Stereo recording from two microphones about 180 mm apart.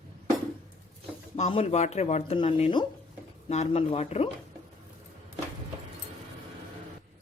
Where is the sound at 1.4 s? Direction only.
35° left (ahead or behind).